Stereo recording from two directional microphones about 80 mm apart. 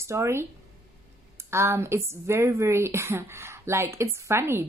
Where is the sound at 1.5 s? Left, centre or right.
Right.